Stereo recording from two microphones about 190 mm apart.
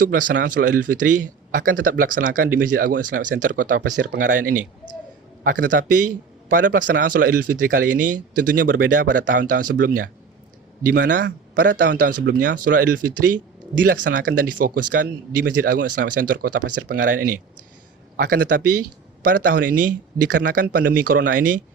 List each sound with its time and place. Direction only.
0.0 s a man's voice: 45° right (ahead or behind)
5.4 s a man's voice: 45° right (ahead or behind)